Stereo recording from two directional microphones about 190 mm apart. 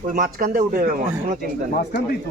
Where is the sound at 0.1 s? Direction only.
45° right (ahead or behind).